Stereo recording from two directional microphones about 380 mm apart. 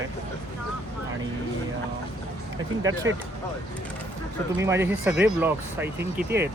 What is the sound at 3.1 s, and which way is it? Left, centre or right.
Speech, right.